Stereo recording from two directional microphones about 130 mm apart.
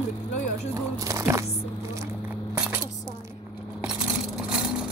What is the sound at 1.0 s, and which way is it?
Music, 25° right (ahead or behind).